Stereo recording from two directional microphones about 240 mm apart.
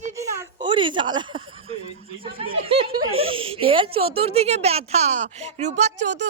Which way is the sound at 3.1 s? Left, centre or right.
Right.